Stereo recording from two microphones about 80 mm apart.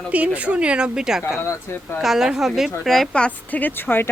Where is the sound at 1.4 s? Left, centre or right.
Left.